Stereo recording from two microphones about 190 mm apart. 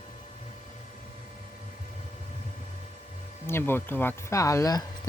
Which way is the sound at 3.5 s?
10° left (ahead or behind).